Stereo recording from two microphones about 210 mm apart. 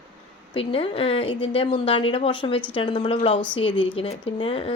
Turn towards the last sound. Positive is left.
turn(degrees=25)  # may be behind; listen again after turning